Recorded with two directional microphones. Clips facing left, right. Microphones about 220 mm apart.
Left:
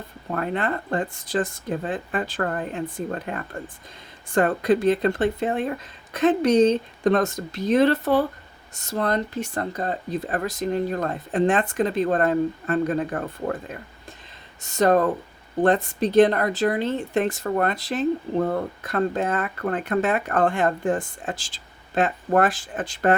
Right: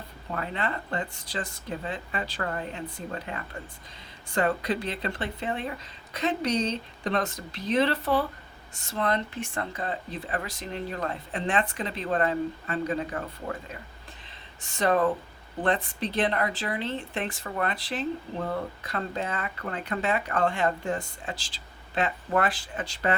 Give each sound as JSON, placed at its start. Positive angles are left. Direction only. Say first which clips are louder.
{"t": 0.3, "sound": "a woman's voice", "louder": "left 6 dB", "side_deg": 50}